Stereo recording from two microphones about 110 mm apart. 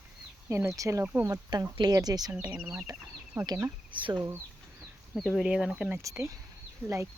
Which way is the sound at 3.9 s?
50° right (ahead or behind).